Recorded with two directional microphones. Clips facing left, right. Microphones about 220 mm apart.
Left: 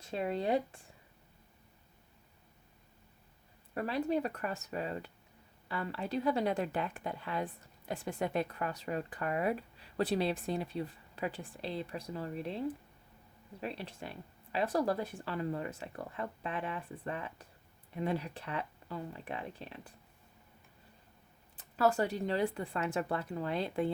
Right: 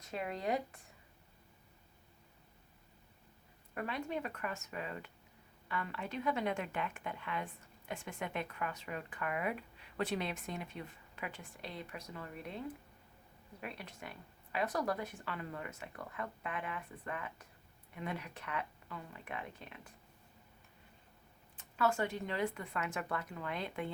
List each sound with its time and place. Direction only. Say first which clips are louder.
0.0 s speech: left 5 dB; 30° left (ahead or behind)
3.8 s speech: left 7 dB; 35° left (ahead or behind)
21.6 s speech: left 4 dB; 35° left (ahead or behind)